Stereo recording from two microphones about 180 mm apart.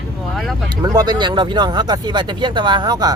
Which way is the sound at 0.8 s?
20° right (ahead or behind).